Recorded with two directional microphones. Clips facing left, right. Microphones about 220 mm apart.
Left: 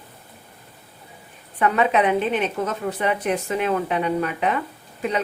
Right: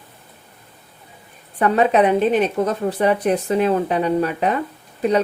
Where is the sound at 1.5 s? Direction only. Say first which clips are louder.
Right 4 dB; 35° right (ahead or behind).